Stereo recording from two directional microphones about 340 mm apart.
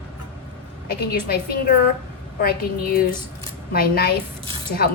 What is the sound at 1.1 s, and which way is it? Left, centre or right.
A woman's voice, left.